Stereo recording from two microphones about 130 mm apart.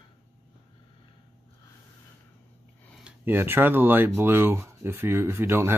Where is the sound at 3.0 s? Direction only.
15° right (ahead or behind).